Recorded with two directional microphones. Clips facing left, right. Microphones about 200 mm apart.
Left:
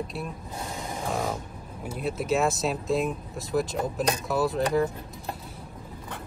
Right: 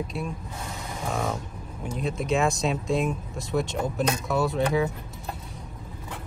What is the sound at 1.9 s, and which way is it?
Speech, 5° left (ahead or behind).